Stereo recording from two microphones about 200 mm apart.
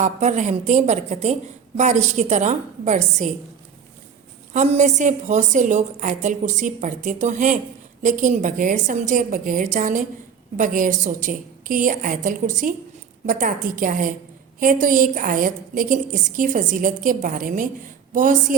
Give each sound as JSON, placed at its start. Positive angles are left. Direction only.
{"t": 0.0, "sound": "a woman's voice", "side_deg": -35}
{"t": 4.5, "sound": "a woman's voice", "side_deg": -35}